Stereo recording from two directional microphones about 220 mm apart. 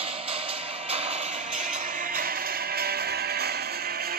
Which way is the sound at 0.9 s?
25° right (ahead or behind).